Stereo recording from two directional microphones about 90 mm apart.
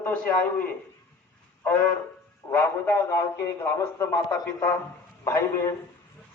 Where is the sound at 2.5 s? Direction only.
25° left (ahead or behind).